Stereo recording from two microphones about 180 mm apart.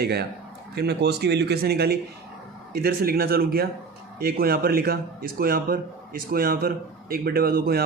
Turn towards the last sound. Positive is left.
turn(degrees=-55)  # may be behind; listen again after turning